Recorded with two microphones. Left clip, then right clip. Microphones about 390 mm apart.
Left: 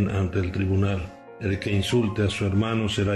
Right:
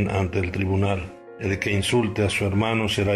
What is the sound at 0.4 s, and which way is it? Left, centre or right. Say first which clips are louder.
Speech: right 2 dB; centre.